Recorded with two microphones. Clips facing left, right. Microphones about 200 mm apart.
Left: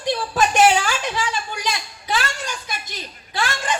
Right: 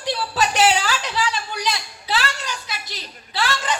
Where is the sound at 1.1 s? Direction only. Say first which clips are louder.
Right 1 dB; 50° left (ahead or behind).